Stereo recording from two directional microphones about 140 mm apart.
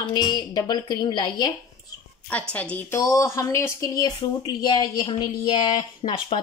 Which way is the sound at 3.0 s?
25° left (ahead or behind).